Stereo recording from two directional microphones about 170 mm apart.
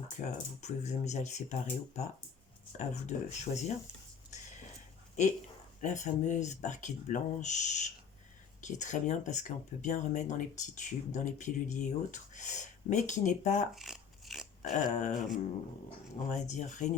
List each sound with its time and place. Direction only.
0.2 s speech: 45° left (ahead or behind)
2.7 s speech: 45° left (ahead or behind)
5.2 s speech: 45° left (ahead or behind)
13.7 s a sound: centre (ahead or behind)
14.6 s speech: 45° left (ahead or behind)
16.3 s speech: 45° left (ahead or behind)